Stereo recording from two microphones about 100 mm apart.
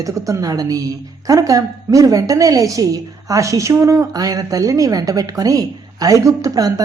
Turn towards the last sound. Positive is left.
turn(degrees=-35)  # may be behind; listen again after turning